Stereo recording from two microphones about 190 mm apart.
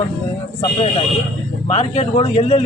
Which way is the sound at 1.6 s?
35° left (ahead or behind).